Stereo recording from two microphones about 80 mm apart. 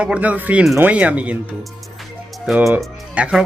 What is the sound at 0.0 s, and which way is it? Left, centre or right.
Speech, centre.